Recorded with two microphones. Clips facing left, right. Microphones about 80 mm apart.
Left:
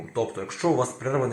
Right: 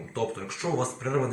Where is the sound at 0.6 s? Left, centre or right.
Left.